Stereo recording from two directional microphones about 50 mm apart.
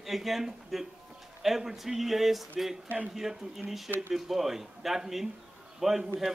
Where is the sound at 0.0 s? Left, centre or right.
Centre.